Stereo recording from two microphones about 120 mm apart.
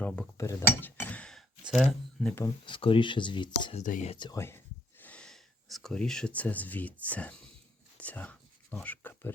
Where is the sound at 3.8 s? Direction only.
90° left.